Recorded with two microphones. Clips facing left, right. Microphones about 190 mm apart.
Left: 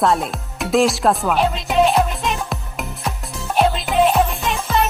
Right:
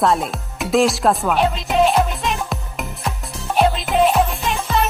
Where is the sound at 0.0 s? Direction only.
Centre (ahead or behind).